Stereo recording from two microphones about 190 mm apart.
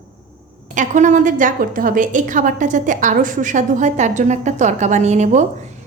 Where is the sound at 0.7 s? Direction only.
40° right (ahead or behind).